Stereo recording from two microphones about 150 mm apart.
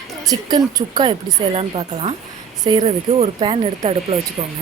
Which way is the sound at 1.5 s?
40° right (ahead or behind).